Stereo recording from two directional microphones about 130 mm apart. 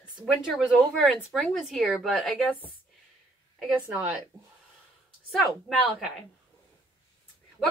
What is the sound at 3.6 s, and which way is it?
Speech, 5° right (ahead or behind).